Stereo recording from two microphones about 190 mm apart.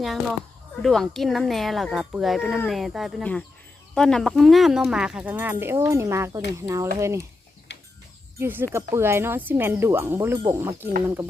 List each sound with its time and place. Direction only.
0.0 s speech: centre (ahead or behind); by 6.8 s 15° right (ahead or behind)
7.7 s a sound: 65° left (ahead or behind)
8.4 s speech: 10° right (ahead or behind)